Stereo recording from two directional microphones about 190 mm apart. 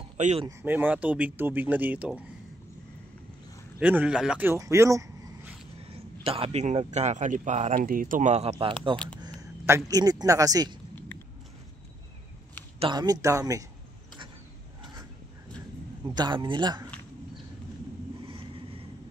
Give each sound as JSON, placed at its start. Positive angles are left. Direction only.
{"t": 0.2, "sound": "speech", "side_deg": -35}
{"t": 0.5, "sound": "speech", "side_deg": -10}
{"t": 3.8, "sound": "speech", "side_deg": -5}
{"t": 5.8, "sound": "speech", "side_deg": -30}
{"t": 8.9, "sound": "a sound", "side_deg": 5}
{"t": 9.2, "sound": "speech", "side_deg": -20}
{"t": 12.7, "sound": "speech", "side_deg": -25}
{"t": 16.2, "sound": "speech", "side_deg": -25}
{"t": 18.2, "sound": "vehicle", "side_deg": -30}